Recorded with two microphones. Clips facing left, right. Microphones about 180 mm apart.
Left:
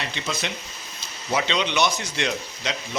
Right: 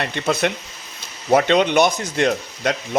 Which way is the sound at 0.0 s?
55° right (ahead or behind).